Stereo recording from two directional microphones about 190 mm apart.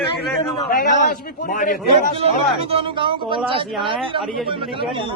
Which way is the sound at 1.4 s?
45° left (ahead or behind).